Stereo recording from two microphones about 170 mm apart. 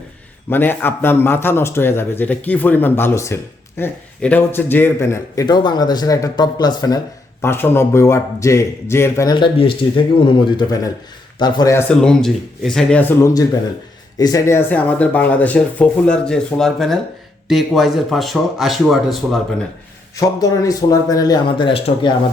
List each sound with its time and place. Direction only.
0.5 s a man's voice: 10° left (ahead or behind)
7.4 s a man's voice: 15° left (ahead or behind)
9.3 s speech: 30° left (ahead or behind)
11.9 s a man's voice: 5° left (ahead or behind)
20.1 s speech: 20° left (ahead or behind)